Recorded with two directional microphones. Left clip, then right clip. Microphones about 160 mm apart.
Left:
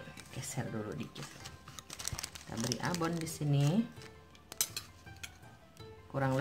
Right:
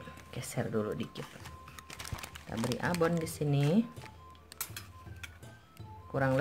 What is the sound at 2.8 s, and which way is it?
Speech, 40° right (ahead or behind).